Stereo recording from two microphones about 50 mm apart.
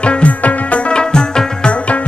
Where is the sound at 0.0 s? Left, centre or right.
Left.